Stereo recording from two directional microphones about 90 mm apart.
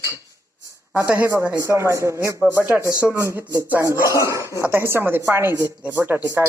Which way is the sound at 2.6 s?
20° right (ahead or behind).